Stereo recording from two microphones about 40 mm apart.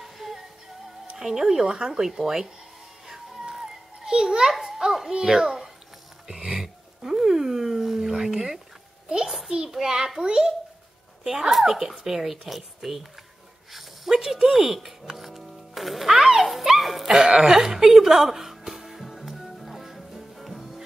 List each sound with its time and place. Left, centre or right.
0.0 s music: centre
1.1 s speech: centre
3.1 s music: centre
5.1 s speech: centre
6.2 s dog: centre
9.7 s a child's voice: centre
11.2 s speech: centre
13.7 s music: centre
17.1 s speech: centre
18.7 s music: centre